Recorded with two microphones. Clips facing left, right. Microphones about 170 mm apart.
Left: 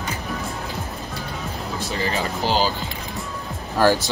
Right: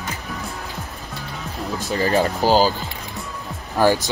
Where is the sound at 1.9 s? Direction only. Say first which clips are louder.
Right 7 dB; 40° right (ahead or behind).